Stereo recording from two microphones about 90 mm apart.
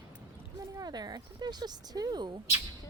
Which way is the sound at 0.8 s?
50° right (ahead or behind).